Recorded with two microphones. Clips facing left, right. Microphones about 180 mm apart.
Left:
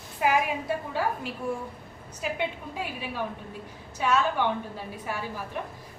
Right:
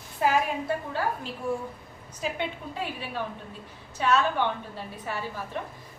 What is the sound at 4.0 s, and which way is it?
Speech, 5° left (ahead or behind).